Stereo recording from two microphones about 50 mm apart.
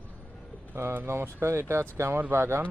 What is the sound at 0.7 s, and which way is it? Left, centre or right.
Speech, right.